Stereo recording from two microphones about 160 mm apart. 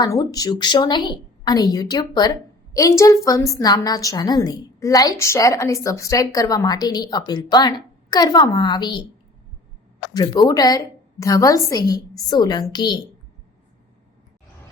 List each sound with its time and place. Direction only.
0.0 s a woman's voice: 20° left (ahead or behind)
10.2 s a woman's voice: 25° left (ahead or behind)